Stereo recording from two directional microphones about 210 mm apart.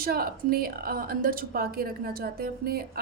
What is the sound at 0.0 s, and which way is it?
Speech, 45° right (ahead or behind).